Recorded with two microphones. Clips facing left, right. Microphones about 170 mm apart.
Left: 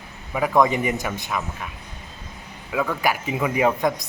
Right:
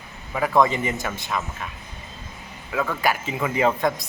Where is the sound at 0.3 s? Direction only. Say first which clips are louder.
Left 1 dB; 10° left (ahead or behind).